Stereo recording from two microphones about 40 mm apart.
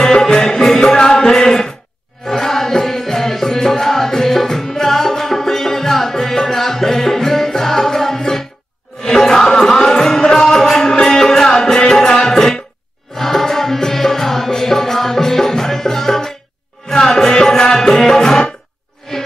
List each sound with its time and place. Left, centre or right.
0.0 s music: centre